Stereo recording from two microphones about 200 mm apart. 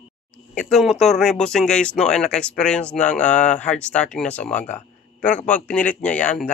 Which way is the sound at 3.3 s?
35° left (ahead or behind).